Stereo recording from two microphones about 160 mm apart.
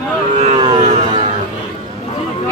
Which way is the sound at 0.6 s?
35° right (ahead or behind).